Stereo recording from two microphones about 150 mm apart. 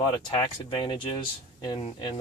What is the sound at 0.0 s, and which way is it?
Speech, 25° left (ahead or behind).